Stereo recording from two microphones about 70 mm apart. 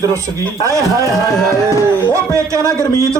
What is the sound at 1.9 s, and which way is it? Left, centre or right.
Speech, right.